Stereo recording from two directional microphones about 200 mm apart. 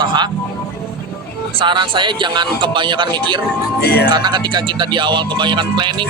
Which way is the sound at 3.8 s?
50° left (ahead or behind).